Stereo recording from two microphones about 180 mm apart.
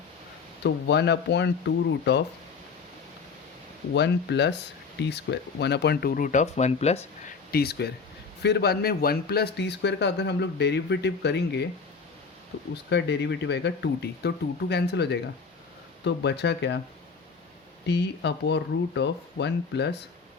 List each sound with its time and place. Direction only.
0.6 s speech: 70° left (ahead or behind)
3.9 s speech: 70° left (ahead or behind); by 7.3 s 35° left (ahead or behind)
7.5 s speech: 60° left (ahead or behind)
12.7 s speech: 70° left (ahead or behind)
17.8 s speech: 70° left (ahead or behind)